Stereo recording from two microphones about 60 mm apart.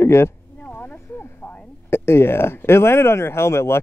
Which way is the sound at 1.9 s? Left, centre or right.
Left.